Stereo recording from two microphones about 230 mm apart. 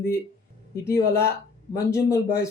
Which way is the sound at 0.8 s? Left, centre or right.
Centre.